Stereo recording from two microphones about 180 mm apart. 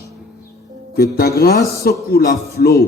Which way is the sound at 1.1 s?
60° left (ahead or behind).